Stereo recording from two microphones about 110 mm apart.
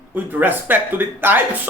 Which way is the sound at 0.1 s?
15° right (ahead or behind).